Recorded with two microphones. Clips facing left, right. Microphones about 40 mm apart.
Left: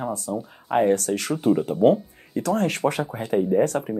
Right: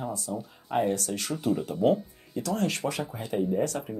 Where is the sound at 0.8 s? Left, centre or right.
Left.